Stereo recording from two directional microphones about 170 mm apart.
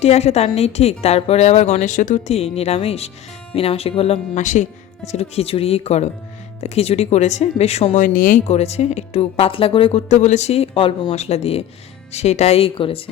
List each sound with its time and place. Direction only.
0.0 s a woman's voice: 40° left (ahead or behind)
8.0 s speech: 55° left (ahead or behind)
8.4 s a woman's voice: 40° left (ahead or behind)